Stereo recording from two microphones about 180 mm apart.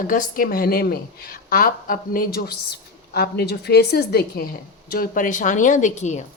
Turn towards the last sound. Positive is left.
turn(degrees=40)  # may be behind; listen again after turning